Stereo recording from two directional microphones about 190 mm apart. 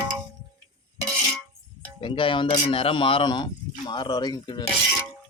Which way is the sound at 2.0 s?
25° left (ahead or behind).